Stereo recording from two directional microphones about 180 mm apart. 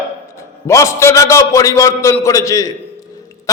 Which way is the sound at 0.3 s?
15° left (ahead or behind).